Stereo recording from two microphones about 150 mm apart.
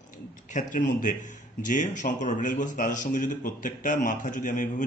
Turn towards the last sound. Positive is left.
turn(degrees=60)  # may be behind; listen again after turning